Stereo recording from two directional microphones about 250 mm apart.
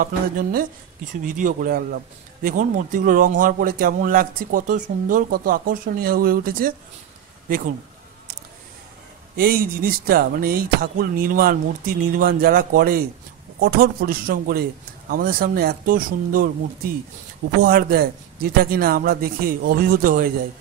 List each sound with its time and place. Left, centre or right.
0.0 s a man's voice: right
9.4 s a man's voice: right